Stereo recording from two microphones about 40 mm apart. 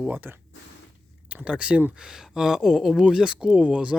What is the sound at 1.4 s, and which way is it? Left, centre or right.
Speech, right.